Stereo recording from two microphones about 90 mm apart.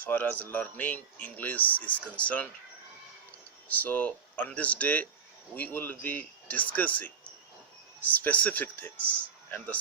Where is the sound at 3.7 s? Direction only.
20° left (ahead or behind).